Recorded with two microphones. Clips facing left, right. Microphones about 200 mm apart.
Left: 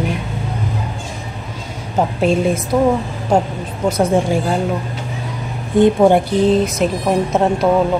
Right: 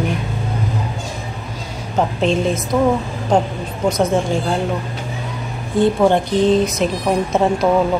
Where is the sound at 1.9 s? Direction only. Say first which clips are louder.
Left 2 dB; 10° left (ahead or behind).